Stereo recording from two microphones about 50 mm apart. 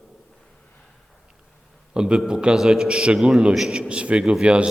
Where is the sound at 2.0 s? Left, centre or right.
Centre.